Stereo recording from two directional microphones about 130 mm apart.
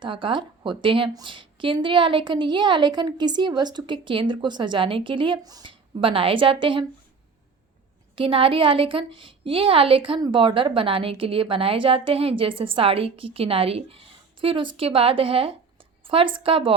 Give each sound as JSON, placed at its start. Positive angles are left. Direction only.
{"t": 0.0, "sound": "a woman's voice", "side_deg": -40}
{"t": 6.0, "sound": "a woman's voice", "side_deg": -45}
{"t": 8.1, "sound": "a woman's voice", "side_deg": -45}